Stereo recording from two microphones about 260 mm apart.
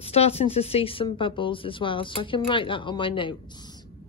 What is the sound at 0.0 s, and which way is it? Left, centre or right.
Speech, left.